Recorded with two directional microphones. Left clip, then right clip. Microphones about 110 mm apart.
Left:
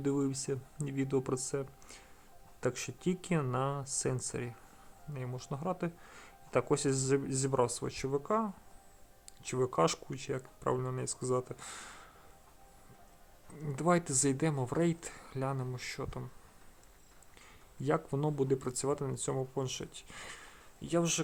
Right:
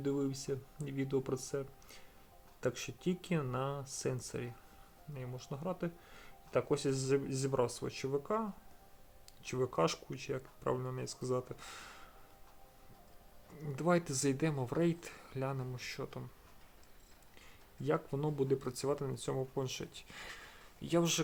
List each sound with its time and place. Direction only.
0.0 s speech: 55° left (ahead or behind)
13.6 s speech: 40° left (ahead or behind)
17.8 s speech: 40° left (ahead or behind)
20.8 s speech: 10° left (ahead or behind)